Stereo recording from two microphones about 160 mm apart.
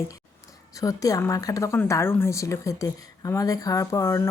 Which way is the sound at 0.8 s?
20° left (ahead or behind).